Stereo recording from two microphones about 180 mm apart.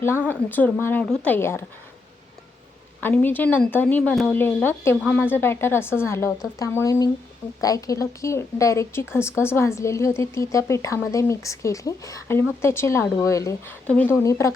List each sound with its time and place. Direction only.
0.3 s a woman's voice: 10° left (ahead or behind)
3.0 s a woman's voice: 10° left (ahead or behind)